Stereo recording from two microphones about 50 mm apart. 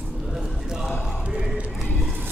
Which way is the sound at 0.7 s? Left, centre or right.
Centre.